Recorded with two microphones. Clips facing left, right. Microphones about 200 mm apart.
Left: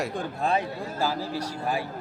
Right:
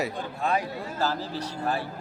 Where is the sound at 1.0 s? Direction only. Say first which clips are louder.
Left 1 dB; 10° left (ahead or behind).